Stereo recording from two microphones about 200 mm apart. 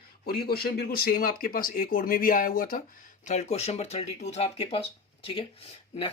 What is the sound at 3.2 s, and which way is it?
Speech, 35° left (ahead or behind).